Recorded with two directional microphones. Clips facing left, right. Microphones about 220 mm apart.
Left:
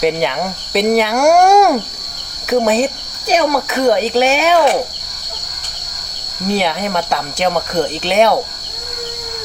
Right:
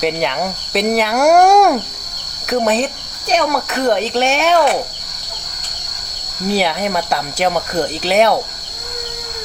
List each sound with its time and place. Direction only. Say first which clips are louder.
0.0 s speech: left 2 dB; centre (ahead or behind)
6.5 s speech: even; centre (ahead or behind)